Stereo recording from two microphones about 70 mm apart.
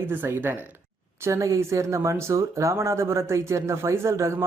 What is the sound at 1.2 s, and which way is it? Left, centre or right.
A man's voice, right.